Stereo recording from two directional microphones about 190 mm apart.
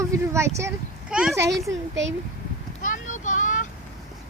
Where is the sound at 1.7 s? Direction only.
75° right (ahead or behind).